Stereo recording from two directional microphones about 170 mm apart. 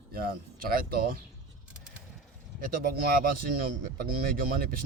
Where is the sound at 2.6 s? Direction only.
55° right (ahead or behind).